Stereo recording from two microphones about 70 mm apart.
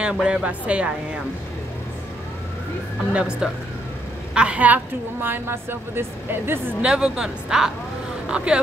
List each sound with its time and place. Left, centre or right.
0.0 s speech: centre
3.1 s a woman's voice: centre; by 6.7 s right
6.8 s speech: centre